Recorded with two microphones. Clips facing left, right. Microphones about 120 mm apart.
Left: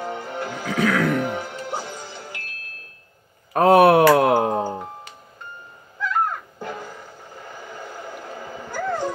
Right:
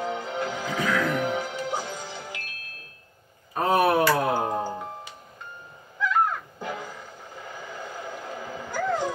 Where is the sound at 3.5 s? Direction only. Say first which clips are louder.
Left 8 dB; 75° left (ahead or behind).